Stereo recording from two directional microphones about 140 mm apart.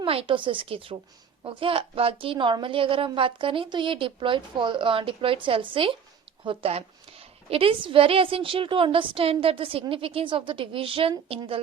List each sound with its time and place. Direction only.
0.0 s a woman's voice: 40° right (ahead or behind)